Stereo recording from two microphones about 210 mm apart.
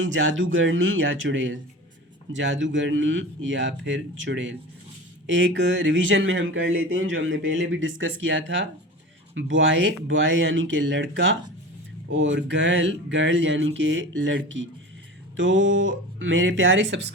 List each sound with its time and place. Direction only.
0.0 s speech: 65° right (ahead or behind)